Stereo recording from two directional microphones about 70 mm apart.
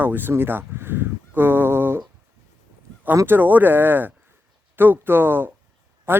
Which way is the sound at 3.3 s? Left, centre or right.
Right.